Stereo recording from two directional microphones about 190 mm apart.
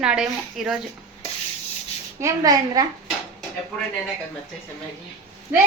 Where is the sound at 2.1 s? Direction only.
20° right (ahead or behind).